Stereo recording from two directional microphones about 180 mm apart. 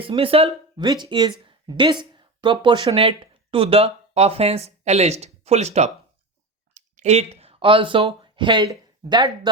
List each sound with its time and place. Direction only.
0.0 s speech: 30° right (ahead or behind)